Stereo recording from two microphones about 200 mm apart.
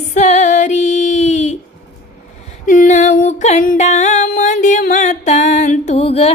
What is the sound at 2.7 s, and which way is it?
Music, 40° left (ahead or behind).